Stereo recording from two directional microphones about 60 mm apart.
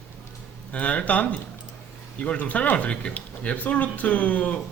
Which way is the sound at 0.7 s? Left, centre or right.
Left.